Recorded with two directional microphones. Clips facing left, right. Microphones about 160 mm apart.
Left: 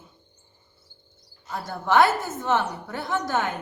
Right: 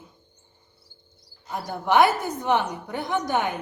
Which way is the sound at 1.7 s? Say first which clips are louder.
Right 1 dB; 15° right (ahead or behind).